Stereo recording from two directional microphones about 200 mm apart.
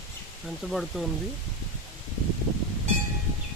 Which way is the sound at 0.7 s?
Centre (ahead or behind).